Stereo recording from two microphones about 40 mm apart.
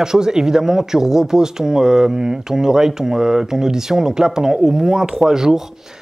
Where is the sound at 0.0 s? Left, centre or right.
Centre.